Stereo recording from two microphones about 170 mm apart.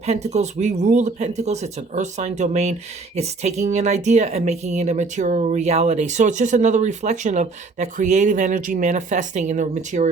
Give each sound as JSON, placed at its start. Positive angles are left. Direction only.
{"t": 0.0, "sound": "speech", "side_deg": -40}